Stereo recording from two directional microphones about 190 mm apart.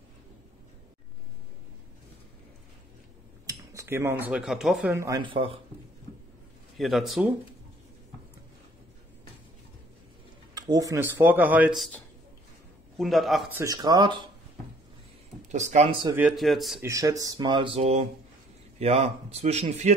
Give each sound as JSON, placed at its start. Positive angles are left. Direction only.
{"t": 3.4, "sound": "speech", "side_deg": -15}
{"t": 6.8, "sound": "speech", "side_deg": 0}
{"t": 10.5, "sound": "speech", "side_deg": -20}
{"t": 13.6, "sound": "speech", "side_deg": -20}
{"t": 15.5, "sound": "speech", "side_deg": -35}
{"t": 16.1, "sound": "speech", "side_deg": -5}
{"t": 16.8, "sound": "speech", "side_deg": -15}